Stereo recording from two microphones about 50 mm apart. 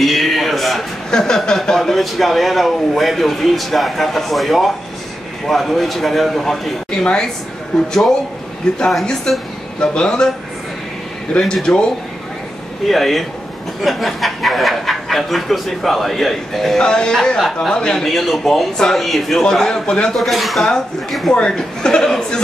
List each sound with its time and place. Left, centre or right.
0.0 s a sound: centre
1.1 s speech: centre
7.0 s speech: centre
11.3 s speech: centre
12.8 s speech: centre
16.7 s speech: centre
19.4 s speech: centre
20.2 s speech: centre
21.3 s speech: centre